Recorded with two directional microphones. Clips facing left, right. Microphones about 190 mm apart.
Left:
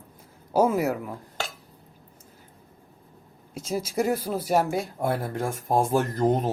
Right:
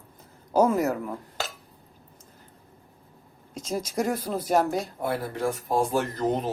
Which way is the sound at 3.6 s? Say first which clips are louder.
Left 2 dB; 5° left (ahead or behind).